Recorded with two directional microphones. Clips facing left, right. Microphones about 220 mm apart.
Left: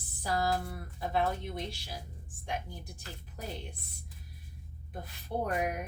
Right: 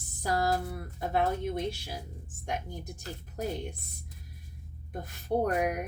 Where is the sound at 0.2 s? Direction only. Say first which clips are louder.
Right 3 dB; 45° right (ahead or behind).